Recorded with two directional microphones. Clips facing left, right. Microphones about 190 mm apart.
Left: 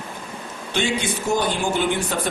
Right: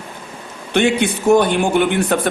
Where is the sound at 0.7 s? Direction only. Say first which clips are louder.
Right 8 dB; 60° right (ahead or behind).